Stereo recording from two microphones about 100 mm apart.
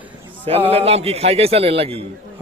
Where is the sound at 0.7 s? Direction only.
90° right; by 2.0 s 75° right (ahead or behind).